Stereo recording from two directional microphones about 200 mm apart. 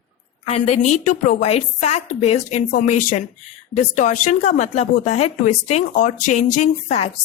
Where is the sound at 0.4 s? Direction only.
35° left (ahead or behind).